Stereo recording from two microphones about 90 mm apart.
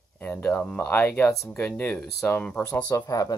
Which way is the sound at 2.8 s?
40° left (ahead or behind).